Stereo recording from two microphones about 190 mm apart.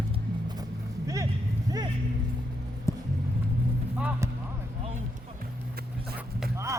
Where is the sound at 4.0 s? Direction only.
5° right (ahead or behind).